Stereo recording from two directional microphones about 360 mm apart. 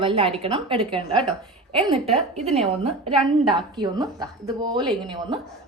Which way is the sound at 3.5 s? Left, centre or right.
Centre.